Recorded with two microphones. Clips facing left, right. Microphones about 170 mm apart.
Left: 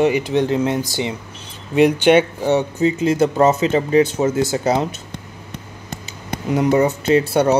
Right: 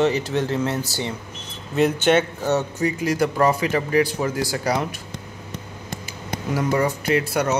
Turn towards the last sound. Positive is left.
turn(degrees=30)  # may be behind; listen again after turning